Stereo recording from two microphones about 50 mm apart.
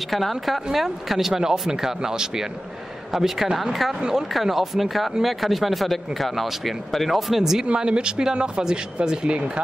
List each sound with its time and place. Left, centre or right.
0.1 s speech: centre
4.0 s speech: centre
7.6 s speech: right